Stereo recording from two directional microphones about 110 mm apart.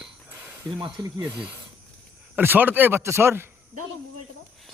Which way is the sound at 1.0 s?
40° right (ahead or behind).